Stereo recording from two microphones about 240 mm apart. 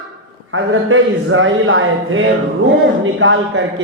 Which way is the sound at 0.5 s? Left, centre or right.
Right.